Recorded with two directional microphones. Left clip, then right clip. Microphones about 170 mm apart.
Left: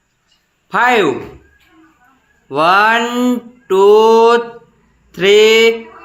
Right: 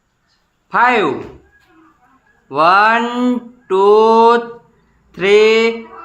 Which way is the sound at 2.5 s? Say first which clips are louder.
Even; 20° left (ahead or behind).